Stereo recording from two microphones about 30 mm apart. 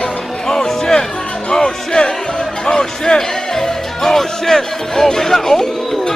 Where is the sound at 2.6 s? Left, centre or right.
Left.